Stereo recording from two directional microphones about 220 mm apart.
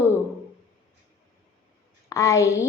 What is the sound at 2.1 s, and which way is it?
Speech, 15° left (ahead or behind).